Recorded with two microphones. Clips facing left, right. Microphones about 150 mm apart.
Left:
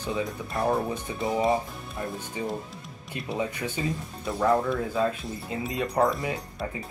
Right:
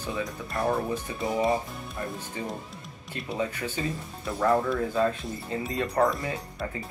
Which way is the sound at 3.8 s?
15° left (ahead or behind).